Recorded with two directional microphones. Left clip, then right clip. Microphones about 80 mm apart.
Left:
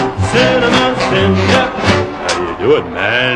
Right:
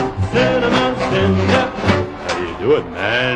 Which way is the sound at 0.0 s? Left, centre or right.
Right.